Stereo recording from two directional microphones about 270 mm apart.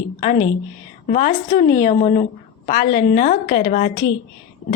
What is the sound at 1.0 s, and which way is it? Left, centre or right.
A woman's voice, left.